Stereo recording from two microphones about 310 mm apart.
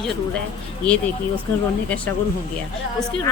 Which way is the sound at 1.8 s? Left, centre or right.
Centre.